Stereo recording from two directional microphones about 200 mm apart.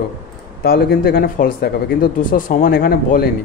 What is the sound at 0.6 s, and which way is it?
Speech, 50° left (ahead or behind).